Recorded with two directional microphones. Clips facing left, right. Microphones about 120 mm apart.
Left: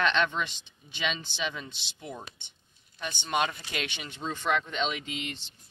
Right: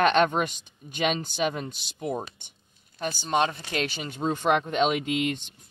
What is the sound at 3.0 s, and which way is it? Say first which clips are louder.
Speech: right 4 dB; 35° right (ahead or behind).